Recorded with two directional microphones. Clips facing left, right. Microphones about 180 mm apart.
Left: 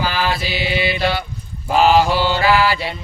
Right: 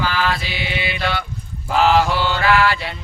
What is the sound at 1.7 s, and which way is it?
Mantra, 20° left (ahead or behind).